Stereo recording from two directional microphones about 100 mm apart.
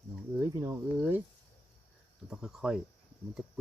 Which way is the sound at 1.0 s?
20° right (ahead or behind).